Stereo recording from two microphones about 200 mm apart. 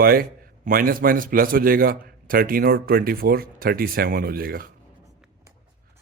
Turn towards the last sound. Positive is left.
turn(degrees=-45)  # may be behind; listen again after turning